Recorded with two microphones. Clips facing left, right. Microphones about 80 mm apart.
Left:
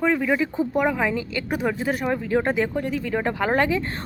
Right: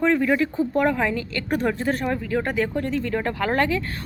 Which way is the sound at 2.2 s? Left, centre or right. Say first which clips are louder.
Left 2 dB; left.